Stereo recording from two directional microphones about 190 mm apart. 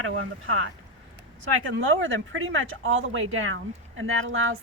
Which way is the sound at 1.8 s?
90° right.